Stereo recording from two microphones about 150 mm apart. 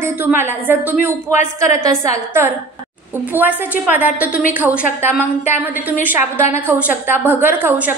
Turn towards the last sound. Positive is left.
turn(degrees=-10)  # may be behind; listen again after turning